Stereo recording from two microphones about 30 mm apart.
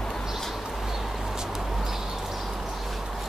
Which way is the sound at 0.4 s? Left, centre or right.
Centre.